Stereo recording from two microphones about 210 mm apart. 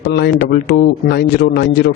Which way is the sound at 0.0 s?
50° left (ahead or behind).